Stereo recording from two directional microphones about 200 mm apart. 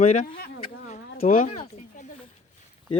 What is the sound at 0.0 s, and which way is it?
Speech, 40° left (ahead or behind).